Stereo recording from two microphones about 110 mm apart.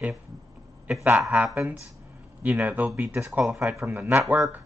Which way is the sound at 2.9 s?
25° right (ahead or behind).